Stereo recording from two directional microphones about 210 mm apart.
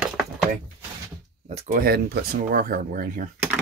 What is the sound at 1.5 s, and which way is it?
Speech, 30° right (ahead or behind).